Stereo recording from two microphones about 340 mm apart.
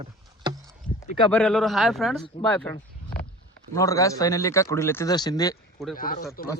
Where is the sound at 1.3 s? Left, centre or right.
Centre.